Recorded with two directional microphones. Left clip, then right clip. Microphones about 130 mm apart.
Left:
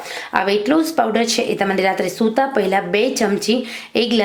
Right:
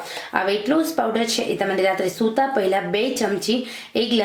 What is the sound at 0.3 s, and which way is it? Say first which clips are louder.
A woman's voice: left 4 dB; 30° left (ahead or behind).